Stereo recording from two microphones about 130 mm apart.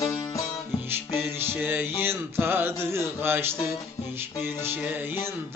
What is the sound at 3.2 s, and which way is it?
Mantra, 15° right (ahead or behind).